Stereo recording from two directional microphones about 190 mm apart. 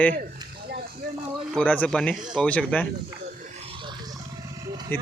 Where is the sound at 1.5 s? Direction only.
5° left (ahead or behind).